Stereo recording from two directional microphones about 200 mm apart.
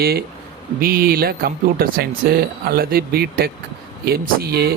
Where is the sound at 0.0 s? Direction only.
50° right (ahead or behind).